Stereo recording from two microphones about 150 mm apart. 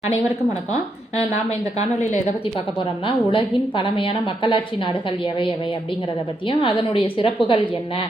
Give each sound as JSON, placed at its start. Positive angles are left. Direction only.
{"t": 3.3, "sound": "a woman's voice", "side_deg": 35}
{"t": 6.5, "sound": "a woman's voice", "side_deg": 35}